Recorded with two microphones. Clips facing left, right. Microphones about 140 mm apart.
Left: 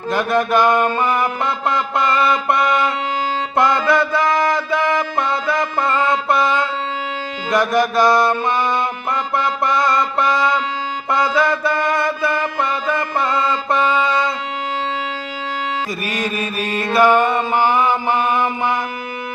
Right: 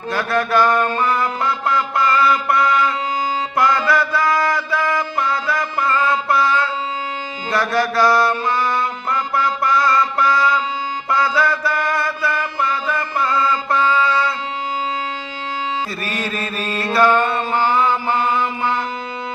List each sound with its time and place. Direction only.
0.1 s music: 20° left (ahead or behind)
16.0 s mantra: 15° left (ahead or behind)